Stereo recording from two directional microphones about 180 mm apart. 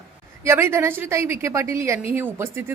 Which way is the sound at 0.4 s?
15° right (ahead or behind).